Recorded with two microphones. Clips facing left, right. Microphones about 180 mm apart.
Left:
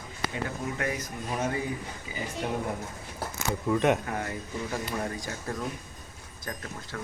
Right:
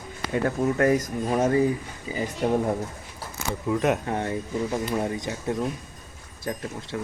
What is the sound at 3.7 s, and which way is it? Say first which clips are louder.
Speech: right 1 dB; centre (ahead or behind).